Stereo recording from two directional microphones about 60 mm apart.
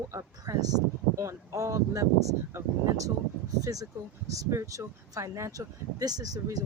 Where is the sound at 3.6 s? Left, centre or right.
Right.